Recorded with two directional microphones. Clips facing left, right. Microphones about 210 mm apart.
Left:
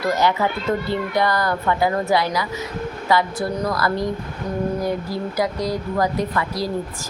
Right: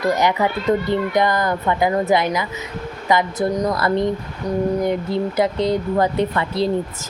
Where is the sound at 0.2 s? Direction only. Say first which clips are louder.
Right 1 dB; 15° right (ahead or behind).